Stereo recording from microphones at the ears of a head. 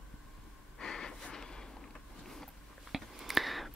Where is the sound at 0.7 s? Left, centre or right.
Left.